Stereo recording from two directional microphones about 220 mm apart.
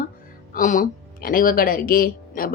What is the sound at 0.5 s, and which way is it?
A woman's voice, 35° left (ahead or behind).